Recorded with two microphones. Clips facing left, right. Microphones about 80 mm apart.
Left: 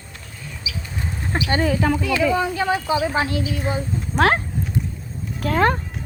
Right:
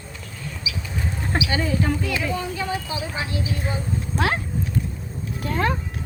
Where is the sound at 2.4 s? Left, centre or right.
Left.